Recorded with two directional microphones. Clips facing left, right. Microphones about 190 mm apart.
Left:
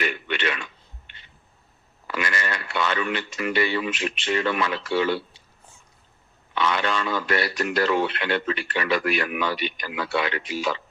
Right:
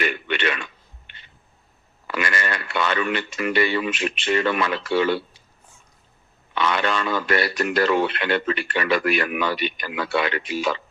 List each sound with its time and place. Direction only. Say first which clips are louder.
0.0 s a sound: right 2 dB; 60° right (ahead or behind)
2.1 s speech: right 2 dB; 55° right (ahead or behind)
6.5 s speech: right 2 dB; 60° right (ahead or behind)